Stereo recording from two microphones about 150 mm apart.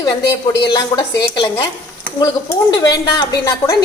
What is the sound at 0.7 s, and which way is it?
A woman's voice, 30° left (ahead or behind).